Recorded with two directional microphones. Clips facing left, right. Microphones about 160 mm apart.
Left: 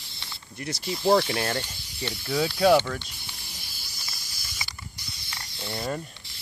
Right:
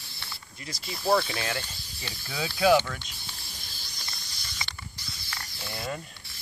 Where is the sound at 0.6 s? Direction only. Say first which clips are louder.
Left 8 dB; 70° left (ahead or behind).